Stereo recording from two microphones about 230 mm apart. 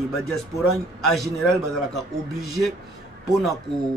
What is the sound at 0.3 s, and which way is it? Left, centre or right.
A man's voice, centre.